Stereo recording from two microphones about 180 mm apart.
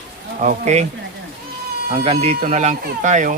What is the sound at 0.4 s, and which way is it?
Speech, 40° right (ahead or behind).